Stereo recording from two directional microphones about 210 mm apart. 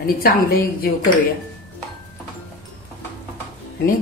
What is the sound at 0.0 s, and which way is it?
Speech, 45° left (ahead or behind).